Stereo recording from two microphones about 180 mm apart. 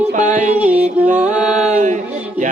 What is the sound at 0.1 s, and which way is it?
Music, 45° right (ahead or behind).